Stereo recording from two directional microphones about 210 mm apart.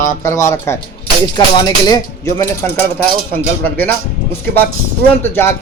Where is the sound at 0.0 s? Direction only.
15° left (ahead or behind).